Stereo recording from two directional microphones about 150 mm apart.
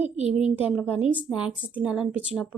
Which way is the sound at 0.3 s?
10° right (ahead or behind).